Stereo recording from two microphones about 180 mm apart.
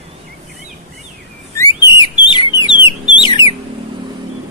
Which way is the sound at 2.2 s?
25° left (ahead or behind).